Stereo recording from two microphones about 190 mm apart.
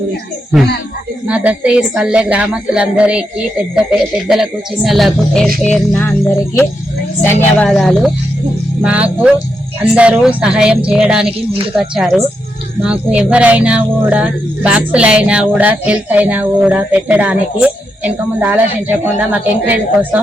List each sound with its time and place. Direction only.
1.3 s speech: 5° right (ahead or behind)
5.6 s music: 5° left (ahead or behind)
7.6 s speech: 5° left (ahead or behind)
11.3 s speech: 30° right (ahead or behind)
11.8 s speech: centre (ahead or behind)